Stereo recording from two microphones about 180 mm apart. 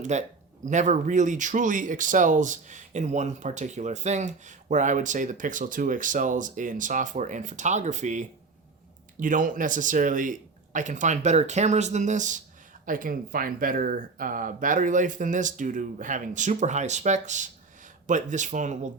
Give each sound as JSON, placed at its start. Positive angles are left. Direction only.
{"t": 0.0, "sound": "speech", "side_deg": -40}